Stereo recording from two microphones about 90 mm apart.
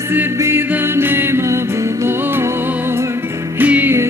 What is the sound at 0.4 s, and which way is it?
Music, 30° right (ahead or behind).